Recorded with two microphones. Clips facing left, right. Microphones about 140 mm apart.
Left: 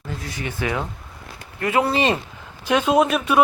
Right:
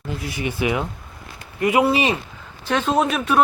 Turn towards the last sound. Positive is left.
turn(degrees=5)  # may be behind; listen again after turning